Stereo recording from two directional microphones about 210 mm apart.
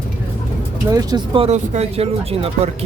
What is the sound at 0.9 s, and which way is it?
Speech, 20° right (ahead or behind).